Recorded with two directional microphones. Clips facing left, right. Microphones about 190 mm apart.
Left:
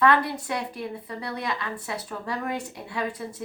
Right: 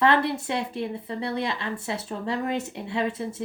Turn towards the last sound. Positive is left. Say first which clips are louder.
# right 3 dB
turn(degrees=-25)  # may be behind; listen again after turning